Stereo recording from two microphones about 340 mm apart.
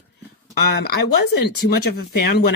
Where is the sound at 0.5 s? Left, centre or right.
Left.